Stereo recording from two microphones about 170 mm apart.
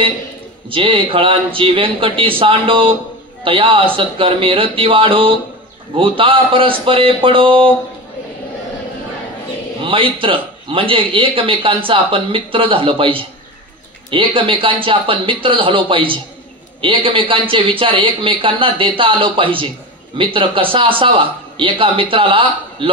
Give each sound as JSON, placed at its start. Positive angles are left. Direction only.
{"t": 0.7, "sound": "a man's voice", "side_deg": -30}
{"t": 9.8, "sound": "a man's voice", "side_deg": -30}